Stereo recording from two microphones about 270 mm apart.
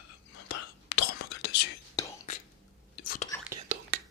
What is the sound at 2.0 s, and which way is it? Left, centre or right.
Whispering, centre.